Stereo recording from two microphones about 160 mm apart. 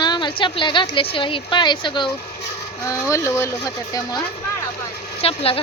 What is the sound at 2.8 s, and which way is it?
Speech, 20° left (ahead or behind).